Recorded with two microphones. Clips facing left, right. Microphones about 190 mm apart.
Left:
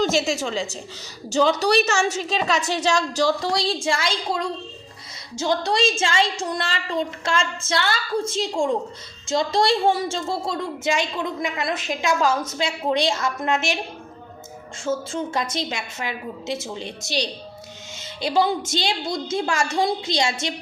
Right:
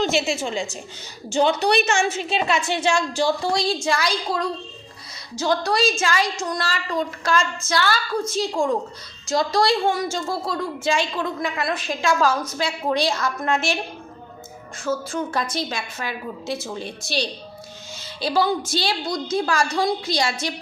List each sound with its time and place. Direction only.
0.0 s a woman's voice: 40° left (ahead or behind); by 13.7 s 20° left (ahead or behind)
14.8 s a woman's voice: 25° left (ahead or behind)